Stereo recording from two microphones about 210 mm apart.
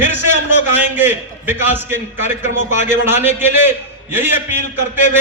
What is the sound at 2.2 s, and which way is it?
Speech, 35° left (ahead or behind).